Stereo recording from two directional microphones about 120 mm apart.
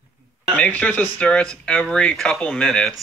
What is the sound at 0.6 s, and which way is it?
Speech, 10° left (ahead or behind).